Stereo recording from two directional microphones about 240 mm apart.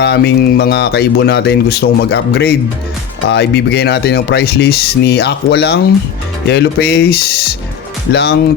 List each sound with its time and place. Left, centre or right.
0.0 s speech: left